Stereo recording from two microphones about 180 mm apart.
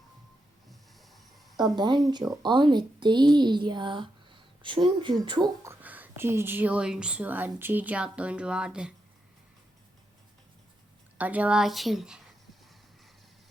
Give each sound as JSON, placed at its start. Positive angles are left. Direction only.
{"t": 0.7, "sound": "a sound", "side_deg": 0}
{"t": 1.7, "sound": "speech", "side_deg": -25}
{"t": 5.6, "sound": "a woman's voice", "side_deg": -10}
{"t": 11.2, "sound": "speech", "side_deg": -10}